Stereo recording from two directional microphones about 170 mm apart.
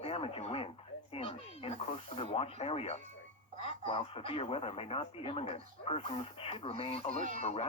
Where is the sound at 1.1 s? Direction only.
35° left (ahead or behind).